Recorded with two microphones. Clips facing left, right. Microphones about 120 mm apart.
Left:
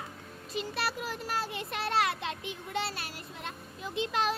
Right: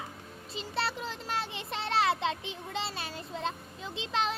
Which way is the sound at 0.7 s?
25° right (ahead or behind).